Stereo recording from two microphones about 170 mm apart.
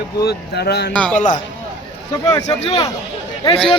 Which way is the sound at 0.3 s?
70° left (ahead or behind).